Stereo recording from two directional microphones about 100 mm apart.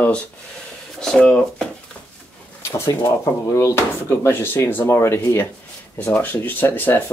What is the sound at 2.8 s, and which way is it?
Speech, 30° left (ahead or behind).